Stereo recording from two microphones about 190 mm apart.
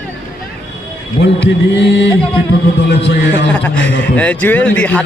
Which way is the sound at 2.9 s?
65° left (ahead or behind).